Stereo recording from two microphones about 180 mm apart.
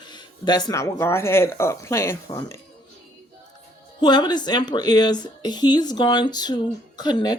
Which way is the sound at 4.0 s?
25° left (ahead or behind).